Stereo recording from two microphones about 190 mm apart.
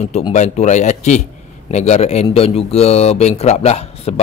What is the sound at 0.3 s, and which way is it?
Speech, 35° left (ahead or behind).